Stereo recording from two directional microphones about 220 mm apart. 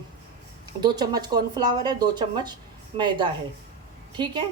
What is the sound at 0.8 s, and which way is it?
A woman's voice, 20° right (ahead or behind).